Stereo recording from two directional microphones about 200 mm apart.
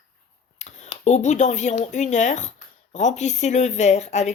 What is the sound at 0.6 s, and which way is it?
Speech, 35° left (ahead or behind).